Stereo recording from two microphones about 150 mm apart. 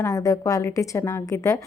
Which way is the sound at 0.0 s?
25° left (ahead or behind).